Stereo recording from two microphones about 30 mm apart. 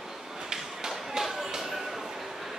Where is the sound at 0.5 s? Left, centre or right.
Centre.